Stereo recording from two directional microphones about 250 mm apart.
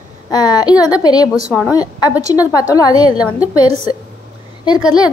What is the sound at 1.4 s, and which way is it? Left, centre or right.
A woman's voice, centre.